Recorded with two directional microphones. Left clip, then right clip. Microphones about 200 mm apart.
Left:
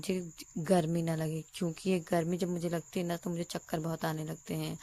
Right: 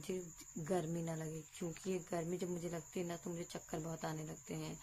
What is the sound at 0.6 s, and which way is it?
Speech, 40° left (ahead or behind).